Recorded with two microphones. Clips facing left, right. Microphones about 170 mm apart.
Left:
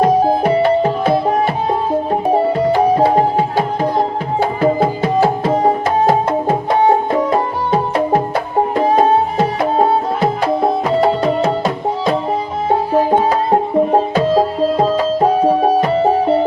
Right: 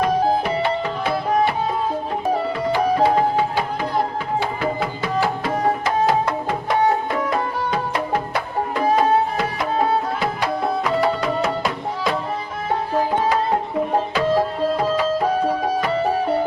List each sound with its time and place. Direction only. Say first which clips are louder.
0.0 s music: left 6 dB; 45° left (ahead or behind)
2.9 s music: left 4 dB; 35° left (ahead or behind)
5.5 s tabla: left 6 dB; 25° left (ahead or behind)
6.7 s music: left 5 dB; 30° left (ahead or behind)